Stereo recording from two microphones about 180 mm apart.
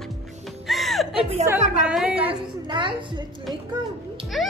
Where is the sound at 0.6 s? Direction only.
Centre (ahead or behind).